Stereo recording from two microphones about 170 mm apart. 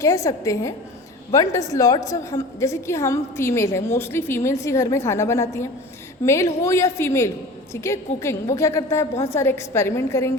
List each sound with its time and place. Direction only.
0.0 s a woman's voice: 20° left (ahead or behind)